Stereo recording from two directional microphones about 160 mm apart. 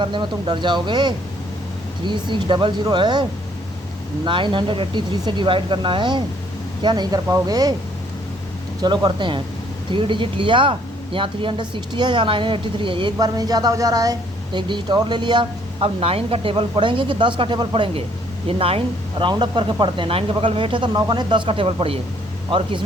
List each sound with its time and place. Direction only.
0.0 s speech: 30° right (ahead or behind)
4.3 s speech: 30° right (ahead or behind)
8.8 s speech: 25° right (ahead or behind)